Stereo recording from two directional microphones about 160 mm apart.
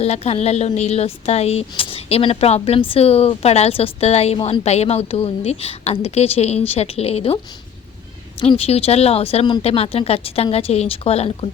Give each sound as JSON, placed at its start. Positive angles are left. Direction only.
{"t": 0.0, "sound": "speech", "side_deg": 40}
{"t": 8.4, "sound": "speech", "side_deg": 35}